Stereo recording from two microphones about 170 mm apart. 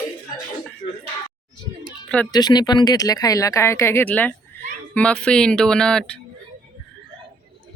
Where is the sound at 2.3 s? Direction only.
25° left (ahead or behind); by 6.1 s 5° left (ahead or behind).